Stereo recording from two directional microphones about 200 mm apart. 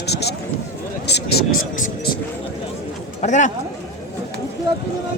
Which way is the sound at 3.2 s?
35° left (ahead or behind).